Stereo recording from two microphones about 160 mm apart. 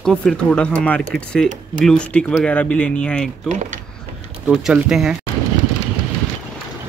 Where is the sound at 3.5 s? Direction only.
50° right (ahead or behind).